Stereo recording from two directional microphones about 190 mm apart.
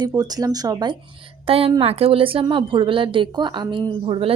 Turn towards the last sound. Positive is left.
turn(degrees=-30)  # may be behind; listen again after turning